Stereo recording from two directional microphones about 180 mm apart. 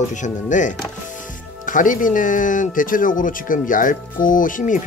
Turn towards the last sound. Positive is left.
turn(degrees=45)  # may be behind; listen again after turning